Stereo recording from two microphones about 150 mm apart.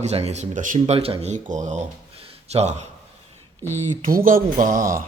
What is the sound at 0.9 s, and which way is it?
Speech, 40° right (ahead or behind).